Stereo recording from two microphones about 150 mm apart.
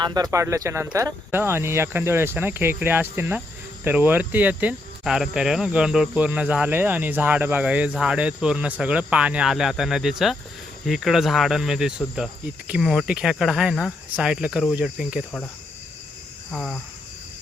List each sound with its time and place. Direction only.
0.0 s speech: 25° right (ahead or behind); by 15.2 s 5° right (ahead or behind)
16.5 s speech: 5° left (ahead or behind)